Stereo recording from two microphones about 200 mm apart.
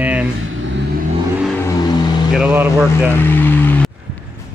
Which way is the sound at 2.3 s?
5° right (ahead or behind).